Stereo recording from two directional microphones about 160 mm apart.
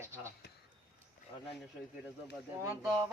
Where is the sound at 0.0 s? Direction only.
15° right (ahead or behind).